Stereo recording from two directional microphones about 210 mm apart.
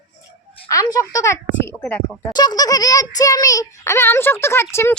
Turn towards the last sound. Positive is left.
turn(degrees=10)  # may be behind; listen again after turning